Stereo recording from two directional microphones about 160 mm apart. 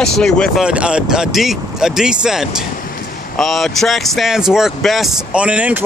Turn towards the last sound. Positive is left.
turn(degrees=-10)  # may be behind; listen again after turning